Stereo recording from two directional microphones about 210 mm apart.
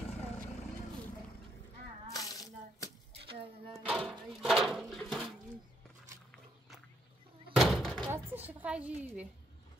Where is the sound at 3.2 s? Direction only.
25° right (ahead or behind).